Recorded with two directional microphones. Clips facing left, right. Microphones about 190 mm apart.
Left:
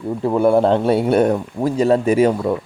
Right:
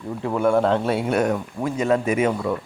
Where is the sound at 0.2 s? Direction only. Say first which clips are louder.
Left 5 dB; 35° left (ahead or behind).